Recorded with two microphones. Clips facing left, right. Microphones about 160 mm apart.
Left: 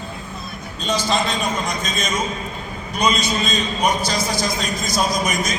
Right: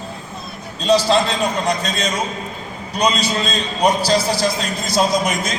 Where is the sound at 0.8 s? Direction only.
35° right (ahead or behind).